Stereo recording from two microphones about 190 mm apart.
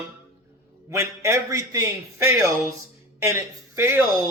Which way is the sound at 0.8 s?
15° right (ahead or behind).